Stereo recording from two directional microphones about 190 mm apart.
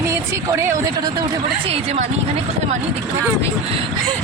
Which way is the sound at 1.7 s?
35° right (ahead or behind).